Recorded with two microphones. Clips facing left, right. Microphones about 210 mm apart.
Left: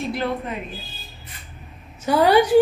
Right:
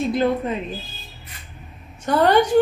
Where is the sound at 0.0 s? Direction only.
20° right (ahead or behind).